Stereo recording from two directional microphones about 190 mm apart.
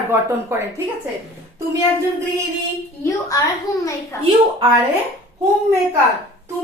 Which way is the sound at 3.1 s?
15° left (ahead or behind).